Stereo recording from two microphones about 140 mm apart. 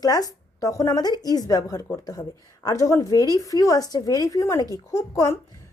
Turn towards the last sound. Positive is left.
turn(degrees=25)  # may be behind; listen again after turning